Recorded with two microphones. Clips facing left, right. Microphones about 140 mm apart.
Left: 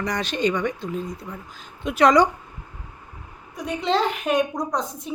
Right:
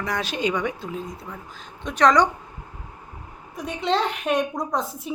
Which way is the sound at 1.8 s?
10° left (ahead or behind).